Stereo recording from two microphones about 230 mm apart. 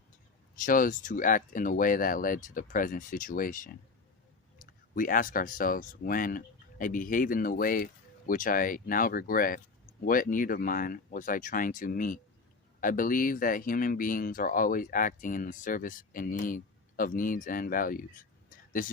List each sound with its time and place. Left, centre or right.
0.6 s speech: left